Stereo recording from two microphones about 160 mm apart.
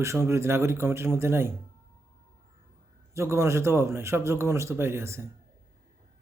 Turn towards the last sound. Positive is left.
turn(degrees=-15)  # may be behind; listen again after turning